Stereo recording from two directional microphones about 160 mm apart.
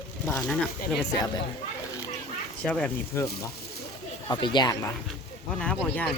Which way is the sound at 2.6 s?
5° left (ahead or behind).